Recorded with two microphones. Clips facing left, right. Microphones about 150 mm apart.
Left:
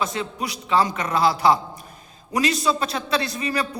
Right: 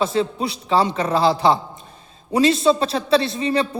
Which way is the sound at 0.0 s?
30° right (ahead or behind).